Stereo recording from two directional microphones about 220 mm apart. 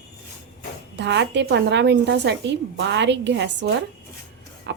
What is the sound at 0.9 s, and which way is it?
A woman's voice, 50° right (ahead or behind).